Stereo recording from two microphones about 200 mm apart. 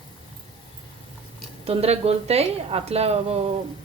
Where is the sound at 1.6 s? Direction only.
30° right (ahead or behind).